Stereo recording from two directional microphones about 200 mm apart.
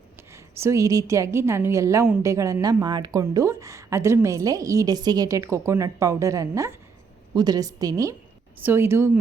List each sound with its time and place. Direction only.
0.3 s a woman's voice: 15° right (ahead or behind)